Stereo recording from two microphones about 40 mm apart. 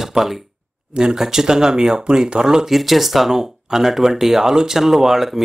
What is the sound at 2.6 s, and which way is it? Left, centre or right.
Speech, centre.